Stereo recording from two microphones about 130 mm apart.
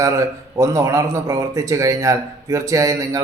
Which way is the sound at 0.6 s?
25° right (ahead or behind).